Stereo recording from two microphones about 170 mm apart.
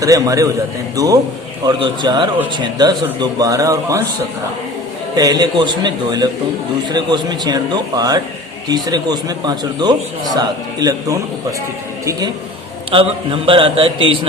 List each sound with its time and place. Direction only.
0.0 s a man's voice: 20° right (ahead or behind)
5.1 s a man's voice: 25° right (ahead or behind)
12.9 s a man's voice: 30° right (ahead or behind)